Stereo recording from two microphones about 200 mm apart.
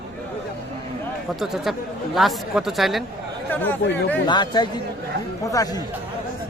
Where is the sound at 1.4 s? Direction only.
Centre (ahead or behind).